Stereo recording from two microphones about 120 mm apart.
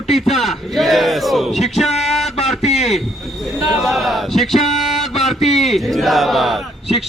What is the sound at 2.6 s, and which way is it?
Speech, 65° left (ahead or behind).